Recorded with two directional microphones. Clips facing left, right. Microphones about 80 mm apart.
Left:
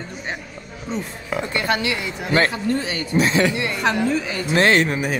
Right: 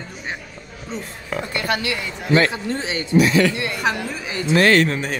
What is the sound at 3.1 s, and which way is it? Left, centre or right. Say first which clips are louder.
Speech: right 2 dB; left.